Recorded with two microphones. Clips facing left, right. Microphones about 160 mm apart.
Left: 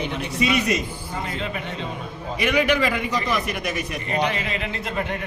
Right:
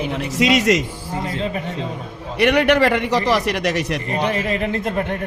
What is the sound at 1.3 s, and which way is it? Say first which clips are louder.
Speech: right 6 dB; 35° right (ahead or behind).